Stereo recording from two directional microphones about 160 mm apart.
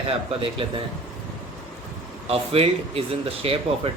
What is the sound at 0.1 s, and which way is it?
Speech, 30° right (ahead or behind).